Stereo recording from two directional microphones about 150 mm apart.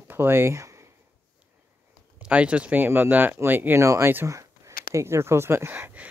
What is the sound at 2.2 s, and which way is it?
Speech, 10° right (ahead or behind).